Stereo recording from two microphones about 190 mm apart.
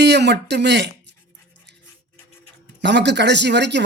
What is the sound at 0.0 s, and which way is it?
Speech, 65° right (ahead or behind).